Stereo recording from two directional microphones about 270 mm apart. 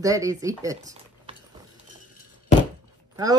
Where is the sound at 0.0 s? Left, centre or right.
Centre.